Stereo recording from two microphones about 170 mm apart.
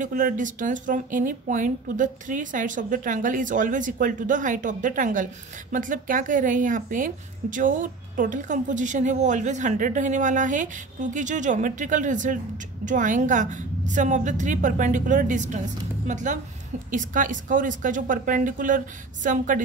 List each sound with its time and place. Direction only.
0.0 s a woman's voice: 50° right (ahead or behind)